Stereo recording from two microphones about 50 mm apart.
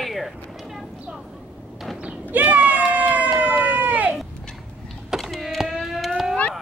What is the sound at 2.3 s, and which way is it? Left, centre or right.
Run, right.